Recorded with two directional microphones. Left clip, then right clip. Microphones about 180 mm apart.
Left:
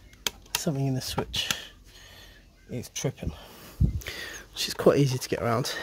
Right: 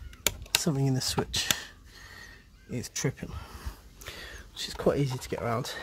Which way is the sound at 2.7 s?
5° right (ahead or behind).